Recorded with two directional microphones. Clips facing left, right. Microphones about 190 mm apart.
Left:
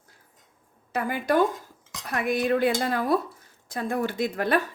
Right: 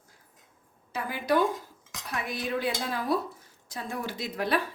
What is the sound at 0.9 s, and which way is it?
Speech, 55° left (ahead or behind).